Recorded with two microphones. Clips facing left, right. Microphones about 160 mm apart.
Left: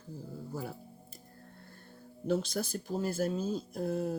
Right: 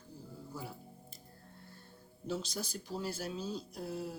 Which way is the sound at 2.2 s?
55° left (ahead or behind).